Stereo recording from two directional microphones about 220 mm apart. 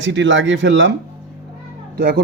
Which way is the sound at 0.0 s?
55° right (ahead or behind).